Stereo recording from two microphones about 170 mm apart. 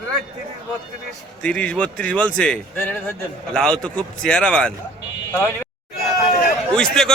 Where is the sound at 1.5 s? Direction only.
10° left (ahead or behind).